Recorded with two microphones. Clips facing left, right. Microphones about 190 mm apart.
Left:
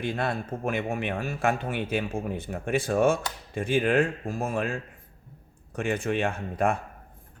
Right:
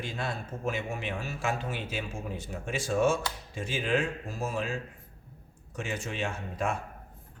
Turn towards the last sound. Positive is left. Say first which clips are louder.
# left 6 dB
turn(degrees=55)  # may be behind; listen again after turning